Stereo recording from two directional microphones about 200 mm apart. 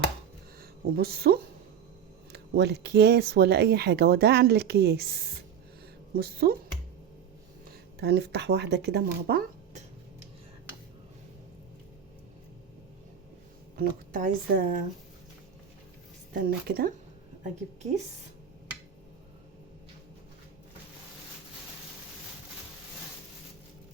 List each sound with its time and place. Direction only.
0.6 s speech: 50° right (ahead or behind)
6.4 s speech: 50° right (ahead or behind)
7.9 s speech: 55° right (ahead or behind)
13.7 s speech: 45° right (ahead or behind)
16.3 s speech: 45° right (ahead or behind)
17.5 s a woman's voice: 35° right (ahead or behind)